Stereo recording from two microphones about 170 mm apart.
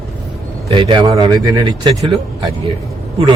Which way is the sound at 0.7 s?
30° right (ahead or behind).